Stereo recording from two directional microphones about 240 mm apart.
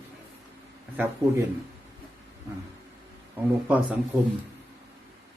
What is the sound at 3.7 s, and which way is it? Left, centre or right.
Speech, centre.